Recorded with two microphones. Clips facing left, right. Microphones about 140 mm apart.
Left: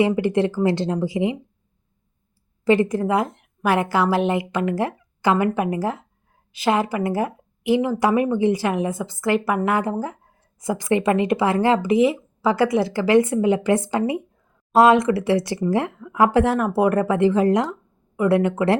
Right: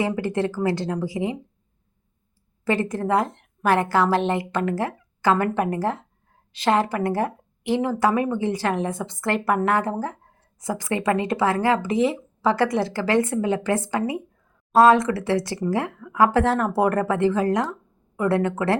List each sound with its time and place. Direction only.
0.0 s speech: 20° left (ahead or behind)
2.6 s a woman's voice: 15° left (ahead or behind)